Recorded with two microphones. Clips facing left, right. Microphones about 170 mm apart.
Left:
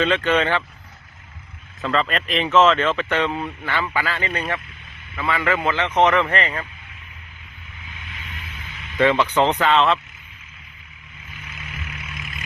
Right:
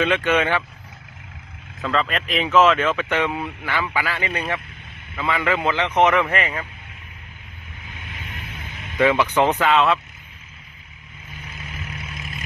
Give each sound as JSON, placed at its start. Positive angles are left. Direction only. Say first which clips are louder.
{"t": 0.0, "sound": "speech", "louder": "even", "side_deg": -10}
{"t": 1.8, "sound": "speech", "louder": "left 1 dB", "side_deg": 0}
{"t": 8.0, "sound": "vehicle", "louder": "right 3 dB", "side_deg": -50}
{"t": 9.0, "sound": "speech", "louder": "even", "side_deg": -10}
{"t": 11.4, "sound": "vehicle", "louder": "right 1 dB", "side_deg": -40}